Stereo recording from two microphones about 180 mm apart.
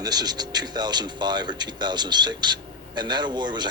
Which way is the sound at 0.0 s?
20° right (ahead or behind).